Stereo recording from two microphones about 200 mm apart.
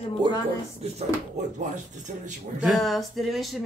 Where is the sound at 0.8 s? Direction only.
30° right (ahead or behind).